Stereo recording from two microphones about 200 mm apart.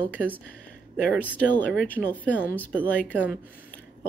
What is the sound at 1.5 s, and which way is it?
Speech, 10° left (ahead or behind).